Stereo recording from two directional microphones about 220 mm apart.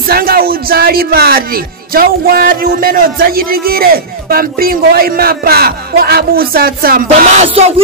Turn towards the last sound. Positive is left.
turn(degrees=-30)  # may be behind; listen again after turning